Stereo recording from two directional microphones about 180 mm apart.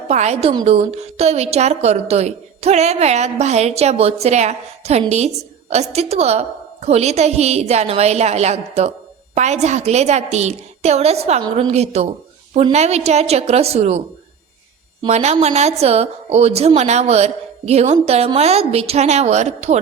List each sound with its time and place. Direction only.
0.1 s a woman's voice: 35° right (ahead or behind)
15.0 s a woman's voice: 35° right (ahead or behind)